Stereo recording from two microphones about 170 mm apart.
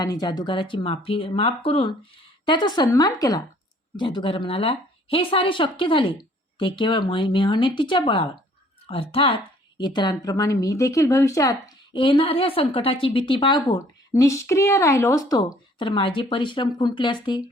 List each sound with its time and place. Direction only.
0.0 s a woman's voice: 25° left (ahead or behind)
11.9 s a woman's voice: 30° left (ahead or behind)